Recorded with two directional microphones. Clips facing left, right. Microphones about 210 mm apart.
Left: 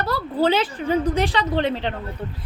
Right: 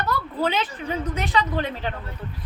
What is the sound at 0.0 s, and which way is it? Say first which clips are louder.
A woman's voice: left 4 dB; 30° left (ahead or behind).